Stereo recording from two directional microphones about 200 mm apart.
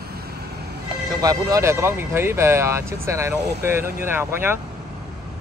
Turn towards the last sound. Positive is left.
turn(degrees=-10)  # may be behind; listen again after turning